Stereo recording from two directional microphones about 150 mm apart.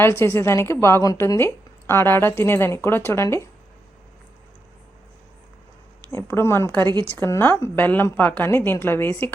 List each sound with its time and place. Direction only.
0.0 s a woman's voice: 15° left (ahead or behind)
6.1 s a woman's voice: 15° left (ahead or behind)